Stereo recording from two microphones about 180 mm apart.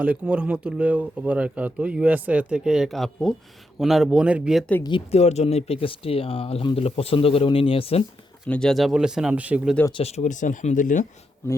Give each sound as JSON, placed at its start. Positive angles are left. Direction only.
{"t": 0.0, "sound": "speech", "side_deg": -5}
{"t": 4.8, "sound": "speech", "side_deg": 30}
{"t": 8.4, "sound": "speech", "side_deg": 5}
{"t": 9.9, "sound": "speech", "side_deg": 35}